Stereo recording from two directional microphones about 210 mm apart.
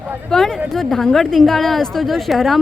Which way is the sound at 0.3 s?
Centre (ahead or behind).